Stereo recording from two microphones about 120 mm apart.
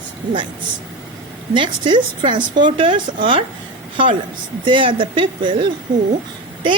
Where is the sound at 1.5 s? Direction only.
40° right (ahead or behind).